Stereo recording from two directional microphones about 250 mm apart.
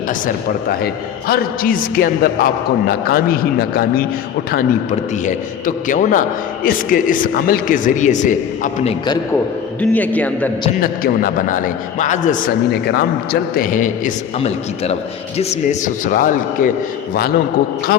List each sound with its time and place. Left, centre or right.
1.3 s speech: left
4.5 s speech: left
9.8 s a man's voice: centre
10.7 s speech: left